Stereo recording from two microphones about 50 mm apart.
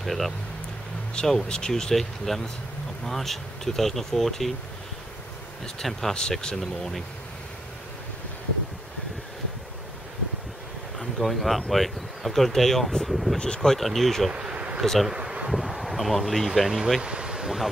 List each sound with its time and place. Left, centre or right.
0.0 s speech: centre
5.8 s speech: centre
6.5 s speech: centre
11.0 s speech: centre
13.4 s speech: centre
14.3 s a sound: right
14.8 s speech: centre
15.0 s speech: centre
17.0 s a sound: centre